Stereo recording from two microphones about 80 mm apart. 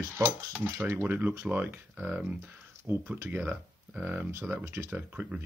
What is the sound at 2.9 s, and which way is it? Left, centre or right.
Speech, right.